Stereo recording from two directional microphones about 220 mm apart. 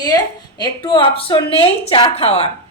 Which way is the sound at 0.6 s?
20° left (ahead or behind).